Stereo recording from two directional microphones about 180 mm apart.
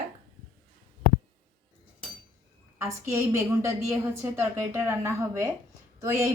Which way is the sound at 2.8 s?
15° right (ahead or behind).